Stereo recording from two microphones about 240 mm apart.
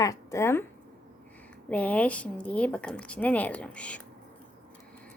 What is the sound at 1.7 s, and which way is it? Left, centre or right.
Speech, centre.